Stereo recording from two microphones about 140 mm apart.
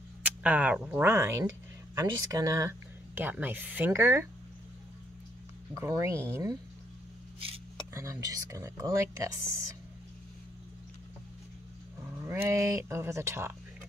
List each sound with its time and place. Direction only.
0.2 s speech: 10° right (ahead or behind)
3.2 s speech: 15° right (ahead or behind)
5.8 s speech: 20° right (ahead or behind)
7.9 s speech: 20° right (ahead or behind)
12.2 s speech: 20° right (ahead or behind)